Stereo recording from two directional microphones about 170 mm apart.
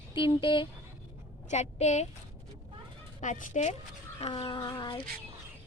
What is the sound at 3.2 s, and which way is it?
Speech, 45° left (ahead or behind).